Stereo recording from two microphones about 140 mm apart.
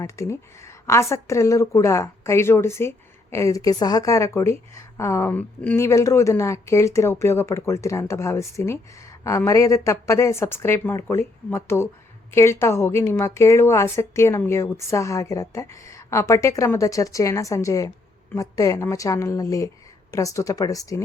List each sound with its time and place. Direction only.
0.0 s speech: 20° left (ahead or behind)